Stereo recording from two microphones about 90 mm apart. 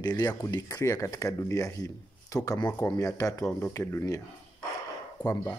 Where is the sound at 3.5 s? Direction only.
25° left (ahead or behind).